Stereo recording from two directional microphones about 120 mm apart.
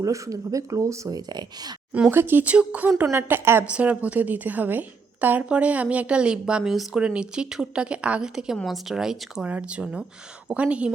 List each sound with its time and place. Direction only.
0.0 s speech: 25° right (ahead or behind)
1.9 s a woman's voice: 15° right (ahead or behind)